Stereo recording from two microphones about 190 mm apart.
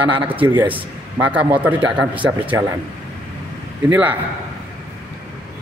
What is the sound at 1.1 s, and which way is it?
Speech, 10° right (ahead or behind).